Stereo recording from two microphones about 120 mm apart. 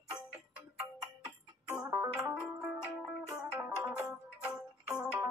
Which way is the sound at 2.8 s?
5° right (ahead or behind).